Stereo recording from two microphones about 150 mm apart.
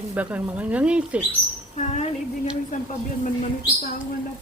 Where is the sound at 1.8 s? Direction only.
50° left (ahead or behind).